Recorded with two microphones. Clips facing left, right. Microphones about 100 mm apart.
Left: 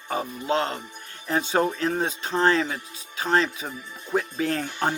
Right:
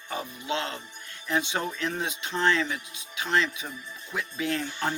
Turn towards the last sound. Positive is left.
turn(degrees=40)  # may be behind; listen again after turning